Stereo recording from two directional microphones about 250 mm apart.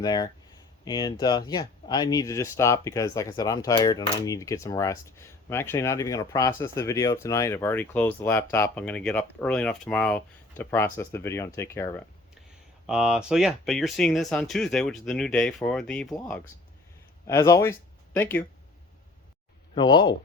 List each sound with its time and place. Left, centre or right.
0.0 s speech: centre
12.9 s speech: centre
19.7 s speech: centre